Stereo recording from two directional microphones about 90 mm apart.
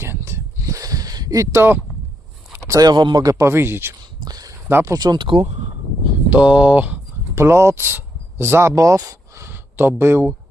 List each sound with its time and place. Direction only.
0.0 s a sound: 30° right (ahead or behind); by 1.5 s 45° right (ahead or behind)
1.5 s speech: 25° right (ahead or behind)
2.6 s speech: 45° right (ahead or behind)
3.2 s speech: 30° right (ahead or behind)
4.2 s a sound: 45° right (ahead or behind)
4.7 s speech: 30° right (ahead or behind)
4.9 s speech: 50° right (ahead or behind)
6.3 s a sound: 15° right (ahead or behind)
7.4 s speech: 30° right (ahead or behind)